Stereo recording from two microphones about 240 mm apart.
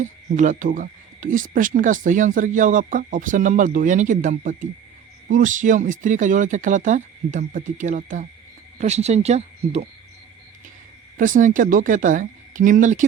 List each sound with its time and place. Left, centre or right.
0.0 s speech: right
11.2 s speech: right